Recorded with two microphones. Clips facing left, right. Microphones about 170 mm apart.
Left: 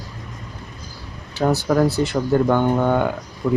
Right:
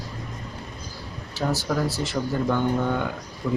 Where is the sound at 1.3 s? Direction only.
60° left (ahead or behind).